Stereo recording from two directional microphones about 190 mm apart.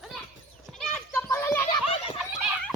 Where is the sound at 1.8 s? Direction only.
30° left (ahead or behind).